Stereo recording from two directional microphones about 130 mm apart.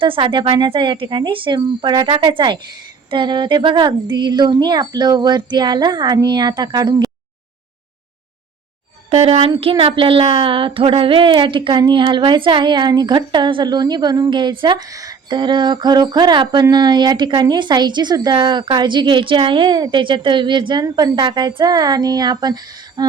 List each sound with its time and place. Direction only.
0.0 s speech: 40° right (ahead or behind)
9.0 s speech: 50° right (ahead or behind); by 22.5 s 30° right (ahead or behind)
23.0 s a sound: 35° right (ahead or behind)